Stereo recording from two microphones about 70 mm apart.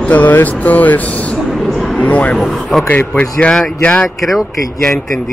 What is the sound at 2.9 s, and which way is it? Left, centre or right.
Speech, centre.